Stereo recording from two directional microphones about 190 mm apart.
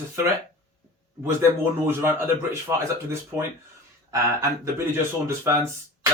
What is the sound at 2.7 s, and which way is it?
Speech, 15° right (ahead or behind).